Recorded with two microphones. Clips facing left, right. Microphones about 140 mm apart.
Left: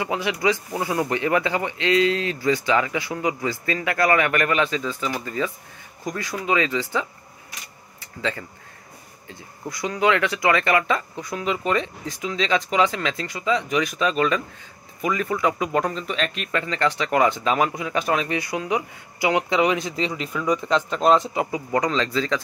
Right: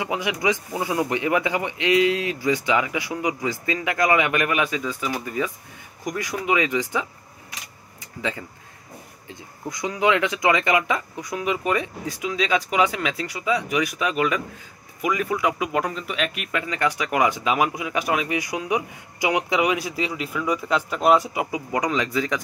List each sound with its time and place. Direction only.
0.0 s speech: 15° right (ahead or behind)